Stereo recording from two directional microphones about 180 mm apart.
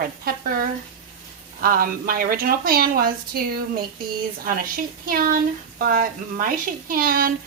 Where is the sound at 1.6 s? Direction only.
55° right (ahead or behind).